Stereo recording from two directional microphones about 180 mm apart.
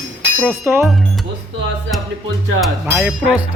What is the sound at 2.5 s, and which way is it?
Speech, centre (ahead or behind).